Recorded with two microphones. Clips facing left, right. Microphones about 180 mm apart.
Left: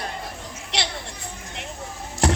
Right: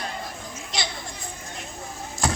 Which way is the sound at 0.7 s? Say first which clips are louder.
Left 3 dB; 70° left (ahead or behind).